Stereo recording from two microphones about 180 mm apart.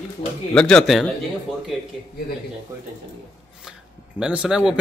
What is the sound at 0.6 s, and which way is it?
Speech, 5° left (ahead or behind).